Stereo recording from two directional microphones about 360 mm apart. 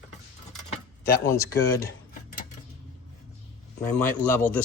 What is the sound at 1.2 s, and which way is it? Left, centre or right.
Speech, centre.